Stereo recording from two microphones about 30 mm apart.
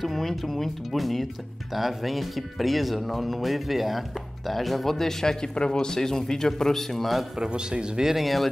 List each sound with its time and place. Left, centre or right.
0.0 s speech: centre
4.9 s speech: centre
5.4 s speech: left; by 7.1 s centre
7.3 s speech: right
8.2 s speech: centre